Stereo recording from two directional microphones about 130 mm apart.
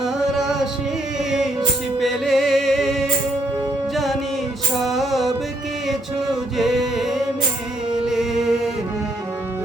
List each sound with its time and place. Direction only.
0.0 s music: centre (ahead or behind)
2.0 s music: centre (ahead or behind)
6.6 s music: centre (ahead or behind)